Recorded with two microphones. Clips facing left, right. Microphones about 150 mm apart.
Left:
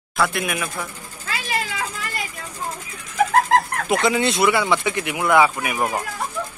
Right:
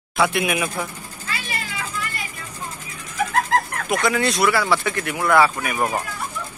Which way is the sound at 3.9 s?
25° left (ahead or behind).